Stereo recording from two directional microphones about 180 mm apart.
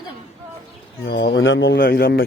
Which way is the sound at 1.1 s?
90° left.